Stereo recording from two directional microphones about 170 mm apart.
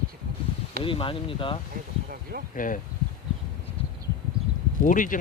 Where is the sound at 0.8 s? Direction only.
30° left (ahead or behind).